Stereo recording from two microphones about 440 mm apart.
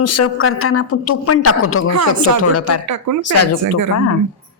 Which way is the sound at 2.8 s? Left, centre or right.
Right.